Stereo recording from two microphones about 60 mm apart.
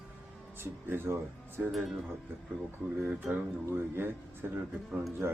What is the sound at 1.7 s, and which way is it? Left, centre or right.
Speech, centre.